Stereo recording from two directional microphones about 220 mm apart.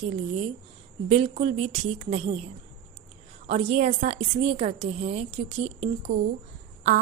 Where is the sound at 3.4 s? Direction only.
30° right (ahead or behind).